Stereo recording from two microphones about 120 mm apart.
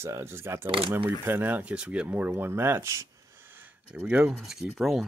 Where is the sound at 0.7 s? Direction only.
45° right (ahead or behind).